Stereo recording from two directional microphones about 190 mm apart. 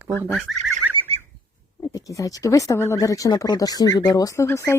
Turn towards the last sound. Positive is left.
turn(degrees=15)  # may be behind; listen again after turning